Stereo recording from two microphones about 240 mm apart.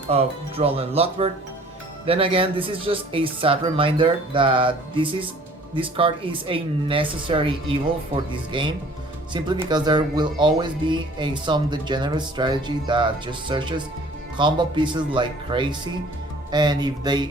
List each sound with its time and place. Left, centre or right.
0.1 s speech: right